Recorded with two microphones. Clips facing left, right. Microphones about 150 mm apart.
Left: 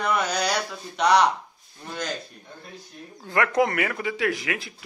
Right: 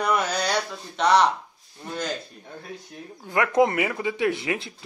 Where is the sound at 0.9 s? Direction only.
Centre (ahead or behind).